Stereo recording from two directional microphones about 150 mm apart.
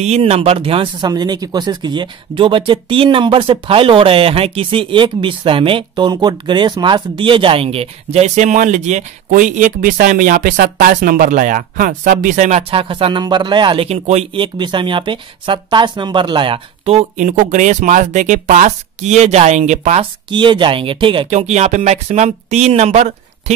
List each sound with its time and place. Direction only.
0.0 s speech: 45° right (ahead or behind)
13.8 s speech: 45° right (ahead or behind)
20.2 s speech: 30° right (ahead or behind)
21.3 s speech: 50° right (ahead or behind)